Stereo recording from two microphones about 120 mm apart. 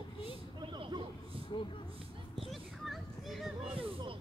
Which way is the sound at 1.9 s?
50° right (ahead or behind).